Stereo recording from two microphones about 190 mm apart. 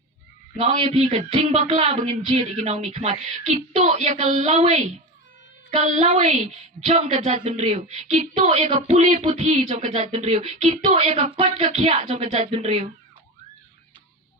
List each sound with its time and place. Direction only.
0.6 s speech: 35° right (ahead or behind)